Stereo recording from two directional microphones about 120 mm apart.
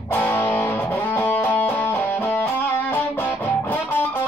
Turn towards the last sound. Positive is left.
turn(degrees=15)  # may be behind; listen again after turning